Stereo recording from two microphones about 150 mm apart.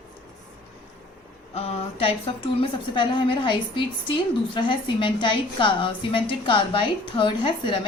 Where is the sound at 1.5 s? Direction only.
40° left (ahead or behind).